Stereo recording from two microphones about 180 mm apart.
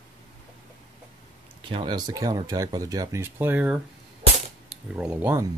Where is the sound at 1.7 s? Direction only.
25° right (ahead or behind).